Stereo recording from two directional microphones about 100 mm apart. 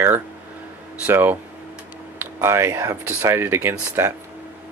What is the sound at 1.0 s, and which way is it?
Speech, 20° right (ahead or behind).